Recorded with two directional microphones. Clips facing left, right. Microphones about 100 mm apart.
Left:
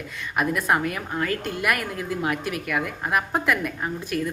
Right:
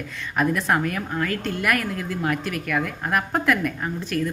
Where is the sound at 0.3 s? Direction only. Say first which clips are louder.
Right 1 dB; 10° left (ahead or behind).